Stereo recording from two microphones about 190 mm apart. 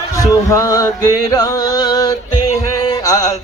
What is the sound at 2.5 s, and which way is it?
Music, 15° left (ahead or behind).